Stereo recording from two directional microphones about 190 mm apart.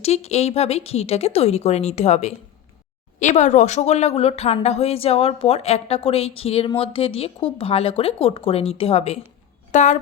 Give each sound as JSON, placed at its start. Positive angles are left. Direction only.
{"t": 0.0, "sound": "speech", "side_deg": 35}